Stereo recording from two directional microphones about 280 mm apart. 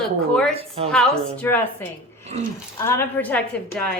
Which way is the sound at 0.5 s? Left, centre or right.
Right.